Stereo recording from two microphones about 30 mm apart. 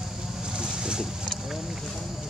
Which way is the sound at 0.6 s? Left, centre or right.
Right.